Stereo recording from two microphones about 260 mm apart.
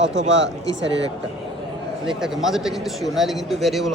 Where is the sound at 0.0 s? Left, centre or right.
Right.